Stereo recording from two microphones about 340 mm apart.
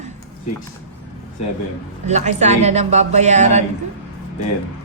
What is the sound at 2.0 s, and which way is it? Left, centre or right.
A woman's voice, centre.